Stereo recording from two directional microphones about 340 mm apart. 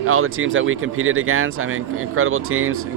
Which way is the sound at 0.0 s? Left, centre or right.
Right.